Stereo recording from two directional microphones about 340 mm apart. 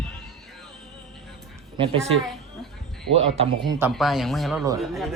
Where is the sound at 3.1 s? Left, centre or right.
Centre.